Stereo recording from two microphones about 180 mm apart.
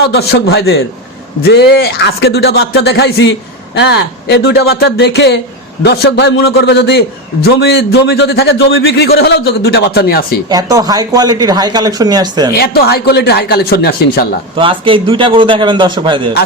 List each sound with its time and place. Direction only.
0.0 s a man's voice: 65° left (ahead or behind)
10.5 s speech: 20° right (ahead or behind)
12.5 s a man's voice: 60° left (ahead or behind)
14.5 s speech: 30° right (ahead or behind)